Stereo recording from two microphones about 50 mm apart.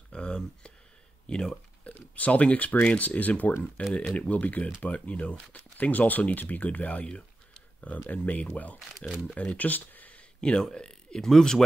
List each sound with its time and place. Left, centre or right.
0.1 s a sound: centre
1.3 s speech: centre
2.1 s speech: left
9.5 s speech: left
10.4 s speech: centre